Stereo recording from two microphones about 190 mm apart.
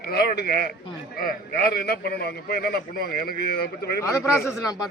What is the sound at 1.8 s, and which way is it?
A man's voice, 55° left (ahead or behind).